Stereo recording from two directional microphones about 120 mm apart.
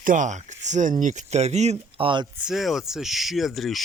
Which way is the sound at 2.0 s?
45° right (ahead or behind).